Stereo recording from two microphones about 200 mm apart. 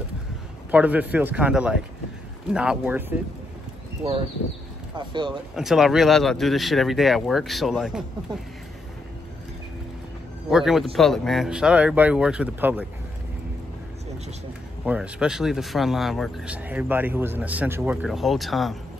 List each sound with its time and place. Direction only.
0.7 s speech: 10° right (ahead or behind)
4.9 s speech: 20° right (ahead or behind)
5.6 s speech: centre (ahead or behind)
10.5 s speech: centre (ahead or behind)
14.9 s speech: 5° right (ahead or behind)